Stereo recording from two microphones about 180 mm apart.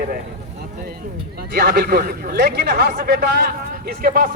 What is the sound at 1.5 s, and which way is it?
Speech, 55° right (ahead or behind).